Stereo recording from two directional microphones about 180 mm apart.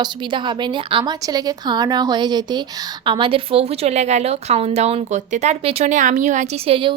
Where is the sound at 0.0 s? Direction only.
25° right (ahead or behind).